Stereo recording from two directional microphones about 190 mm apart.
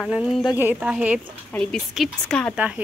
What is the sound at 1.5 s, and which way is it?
A woman's voice, 5° left (ahead or behind).